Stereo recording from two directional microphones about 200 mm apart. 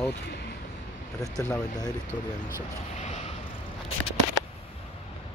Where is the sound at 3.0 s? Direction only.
35° left (ahead or behind).